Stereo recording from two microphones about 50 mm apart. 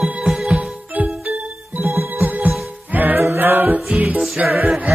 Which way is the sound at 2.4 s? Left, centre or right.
Right.